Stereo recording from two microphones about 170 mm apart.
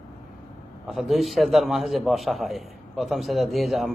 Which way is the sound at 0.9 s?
Centre (ahead or behind).